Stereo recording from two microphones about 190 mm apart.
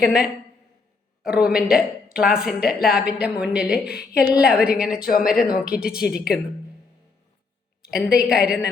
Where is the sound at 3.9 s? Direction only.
55° left (ahead or behind).